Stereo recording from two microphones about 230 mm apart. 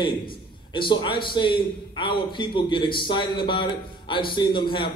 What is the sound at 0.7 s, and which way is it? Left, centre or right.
A man's voice, left.